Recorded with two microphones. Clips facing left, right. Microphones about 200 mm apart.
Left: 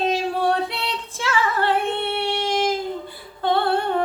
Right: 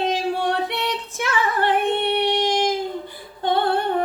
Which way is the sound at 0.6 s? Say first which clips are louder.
Right 3 dB; 20° right (ahead or behind).